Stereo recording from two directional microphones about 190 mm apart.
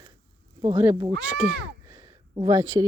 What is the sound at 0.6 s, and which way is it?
Speech, 25° right (ahead or behind).